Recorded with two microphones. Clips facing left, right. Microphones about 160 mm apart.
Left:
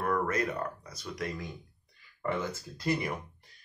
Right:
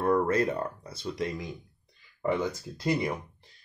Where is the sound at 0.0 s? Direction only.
30° right (ahead or behind).